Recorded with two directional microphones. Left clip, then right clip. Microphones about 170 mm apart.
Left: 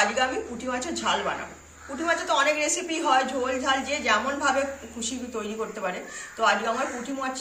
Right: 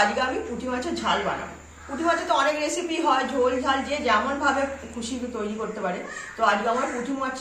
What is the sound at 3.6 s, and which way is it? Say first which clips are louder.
Speech: right 1 dB; 20° left (ahead or behind).